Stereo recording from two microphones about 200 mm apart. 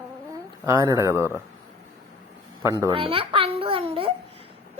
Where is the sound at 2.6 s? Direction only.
15° right (ahead or behind).